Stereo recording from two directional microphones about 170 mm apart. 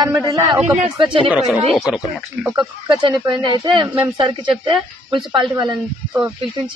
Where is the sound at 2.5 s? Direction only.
25° right (ahead or behind).